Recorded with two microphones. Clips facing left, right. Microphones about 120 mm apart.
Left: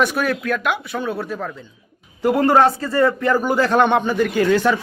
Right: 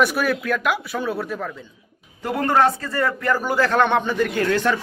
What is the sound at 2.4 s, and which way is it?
A man's voice, 30° left (ahead or behind).